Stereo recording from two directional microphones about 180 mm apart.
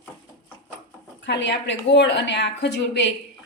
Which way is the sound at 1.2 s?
80° left.